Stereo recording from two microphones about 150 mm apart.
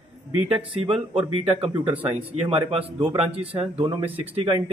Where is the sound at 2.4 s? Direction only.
40° right (ahead or behind).